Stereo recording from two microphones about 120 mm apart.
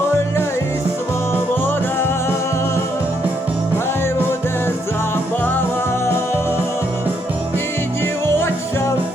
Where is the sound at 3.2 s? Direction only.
15° right (ahead or behind).